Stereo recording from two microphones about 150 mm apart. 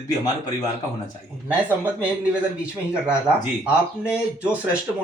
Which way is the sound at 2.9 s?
5° right (ahead or behind).